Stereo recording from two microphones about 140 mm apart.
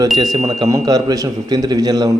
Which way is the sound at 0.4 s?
25° right (ahead or behind).